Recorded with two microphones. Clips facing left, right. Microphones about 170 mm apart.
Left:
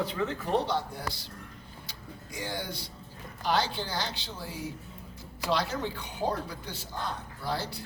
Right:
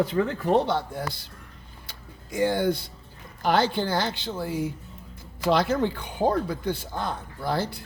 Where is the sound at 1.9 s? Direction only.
55° right (ahead or behind).